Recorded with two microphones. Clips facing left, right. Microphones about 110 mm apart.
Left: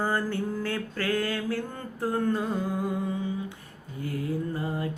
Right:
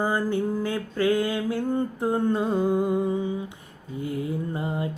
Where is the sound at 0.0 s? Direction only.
15° right (ahead or behind).